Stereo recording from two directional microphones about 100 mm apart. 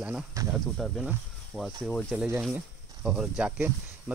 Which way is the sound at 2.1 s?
10° right (ahead or behind).